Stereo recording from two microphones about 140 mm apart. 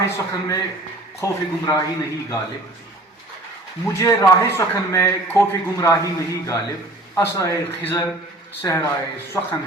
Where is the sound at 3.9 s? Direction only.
20° left (ahead or behind).